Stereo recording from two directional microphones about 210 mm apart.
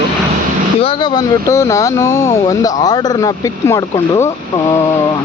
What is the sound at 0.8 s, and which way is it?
Speech, 25° left (ahead or behind).